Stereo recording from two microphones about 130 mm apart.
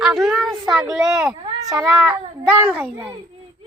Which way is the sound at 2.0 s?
15° right (ahead or behind).